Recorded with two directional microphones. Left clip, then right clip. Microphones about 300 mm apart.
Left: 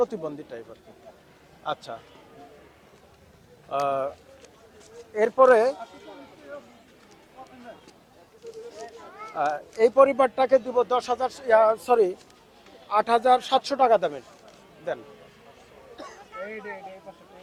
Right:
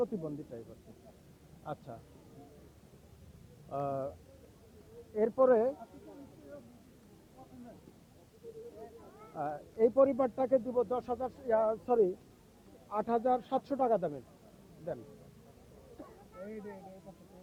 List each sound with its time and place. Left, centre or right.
0.0 s speech: centre
1.6 s speech: centre
3.7 s speech: centre
5.1 s speech: centre
5.7 s a sound: centre
8.8 s speech: centre
16.0 s a sound: centre